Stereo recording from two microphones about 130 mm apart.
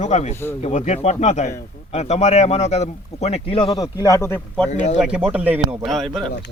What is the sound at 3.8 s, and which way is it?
Speech, 25° left (ahead or behind).